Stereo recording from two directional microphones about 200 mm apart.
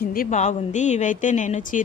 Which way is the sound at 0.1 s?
40° left (ahead or behind).